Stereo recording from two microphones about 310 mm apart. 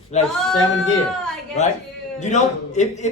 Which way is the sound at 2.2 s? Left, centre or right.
Left.